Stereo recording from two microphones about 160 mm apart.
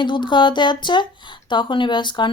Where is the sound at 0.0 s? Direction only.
30° left (ahead or behind).